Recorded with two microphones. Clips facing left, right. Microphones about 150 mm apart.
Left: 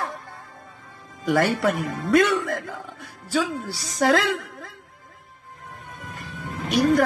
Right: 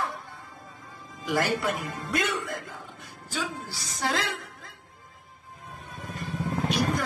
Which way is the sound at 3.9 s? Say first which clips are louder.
Left 9 dB; 70° left (ahead or behind).